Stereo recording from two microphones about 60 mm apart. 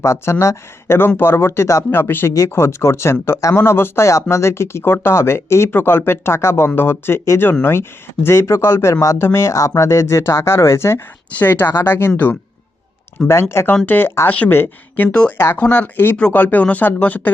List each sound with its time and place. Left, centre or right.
0.0 s speech: left
0.9 s speech: left
9.1 s speech: left
11.3 s speech: left
11.6 s speech: left
13.2 s speech: centre
13.8 s speech: left
14.5 s speech: left
15.5 s speech: left